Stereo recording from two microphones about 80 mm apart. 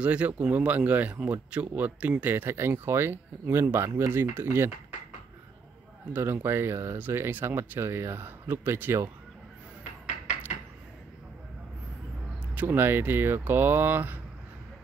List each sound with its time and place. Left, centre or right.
0.0 s speech: centre; by 4.1 s right
4.1 s speech: right
6.1 s speech: right
12.5 s speech: right